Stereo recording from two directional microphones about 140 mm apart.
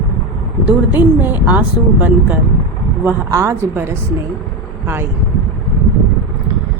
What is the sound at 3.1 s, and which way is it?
Speech, 20° right (ahead or behind).